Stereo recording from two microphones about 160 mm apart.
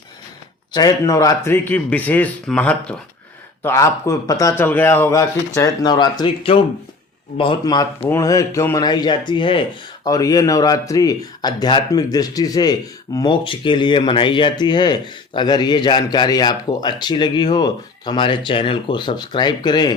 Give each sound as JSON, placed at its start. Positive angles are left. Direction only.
{"t": 0.7, "sound": "speech", "side_deg": 25}